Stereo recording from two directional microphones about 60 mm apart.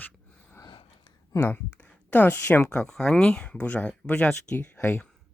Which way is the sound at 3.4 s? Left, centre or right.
Left.